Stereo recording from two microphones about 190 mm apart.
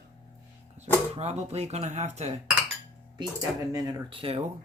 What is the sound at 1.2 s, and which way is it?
Speech, 35° right (ahead or behind).